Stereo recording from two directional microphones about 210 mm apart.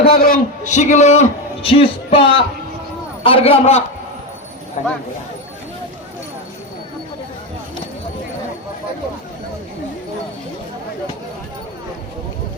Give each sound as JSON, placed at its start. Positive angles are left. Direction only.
{"t": 0.1, "sound": "a man's voice", "side_deg": 45}